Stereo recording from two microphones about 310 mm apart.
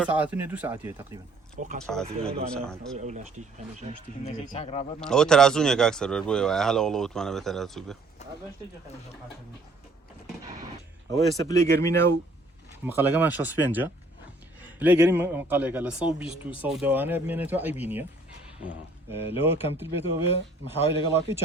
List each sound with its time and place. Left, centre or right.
0.0 s a man's voice: centre
3.0 s speech: right
4.2 s speech: left
4.9 s a man's voice: centre
8.2 s speech: left
11.1 s speech: centre
12.8 s a man's voice: centre
19.1 s speech: centre
20.9 s a man's voice: right